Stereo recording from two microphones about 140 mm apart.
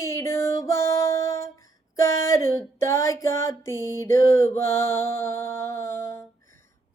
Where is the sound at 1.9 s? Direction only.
20° left (ahead or behind).